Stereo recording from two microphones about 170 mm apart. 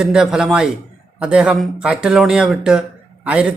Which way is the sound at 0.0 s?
5° right (ahead or behind).